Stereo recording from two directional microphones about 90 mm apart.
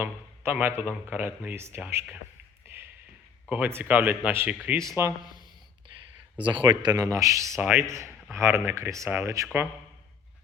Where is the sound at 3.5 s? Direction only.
25° right (ahead or behind).